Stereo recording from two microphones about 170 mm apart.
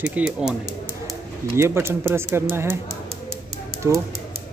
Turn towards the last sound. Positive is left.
turn(degrees=-15)  # may be behind; listen again after turning